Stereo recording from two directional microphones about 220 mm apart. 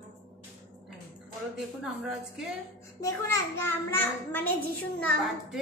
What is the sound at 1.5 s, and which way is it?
Speech, 5° right (ahead or behind).